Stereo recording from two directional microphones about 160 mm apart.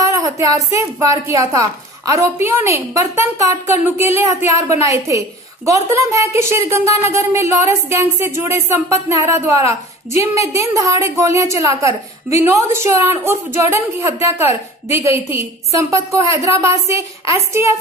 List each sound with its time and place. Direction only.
0.0 s a woman's voice: 20° right (ahead or behind)